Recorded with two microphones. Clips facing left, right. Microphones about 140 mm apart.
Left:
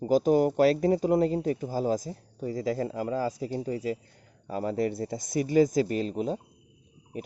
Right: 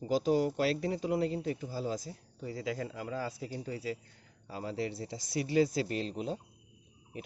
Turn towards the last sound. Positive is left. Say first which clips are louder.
# left 6 dB
turn(degrees=45)  # may be behind; listen again after turning